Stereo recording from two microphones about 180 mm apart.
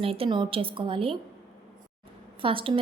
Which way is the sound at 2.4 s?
30° right (ahead or behind).